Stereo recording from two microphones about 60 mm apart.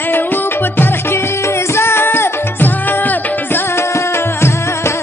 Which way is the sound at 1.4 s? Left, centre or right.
Left.